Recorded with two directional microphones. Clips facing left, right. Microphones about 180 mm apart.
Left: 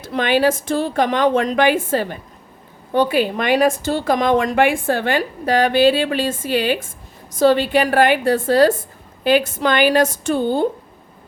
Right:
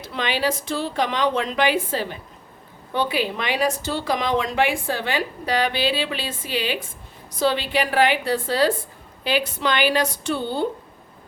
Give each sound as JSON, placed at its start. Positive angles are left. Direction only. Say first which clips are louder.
{"t": 0.0, "sound": "a woman's voice", "louder": "left 7 dB", "side_deg": 50}